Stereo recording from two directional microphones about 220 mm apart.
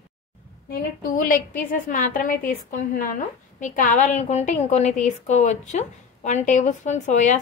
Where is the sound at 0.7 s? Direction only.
40° left (ahead or behind).